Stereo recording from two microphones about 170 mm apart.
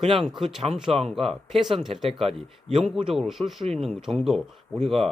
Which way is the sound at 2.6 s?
40° right (ahead or behind).